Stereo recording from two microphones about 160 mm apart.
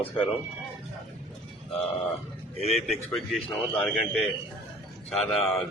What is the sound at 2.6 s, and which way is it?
Speech, 40° left (ahead or behind).